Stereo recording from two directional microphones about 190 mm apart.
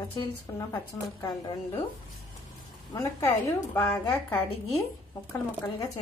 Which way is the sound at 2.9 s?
15° left (ahead or behind).